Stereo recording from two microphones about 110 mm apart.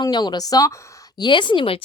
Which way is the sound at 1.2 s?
45° left (ahead or behind).